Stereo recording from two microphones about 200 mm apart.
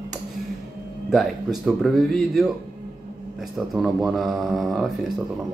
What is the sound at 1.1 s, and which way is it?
Speech, centre (ahead or behind).